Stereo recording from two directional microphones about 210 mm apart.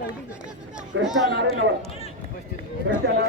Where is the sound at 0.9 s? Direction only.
65° right (ahead or behind).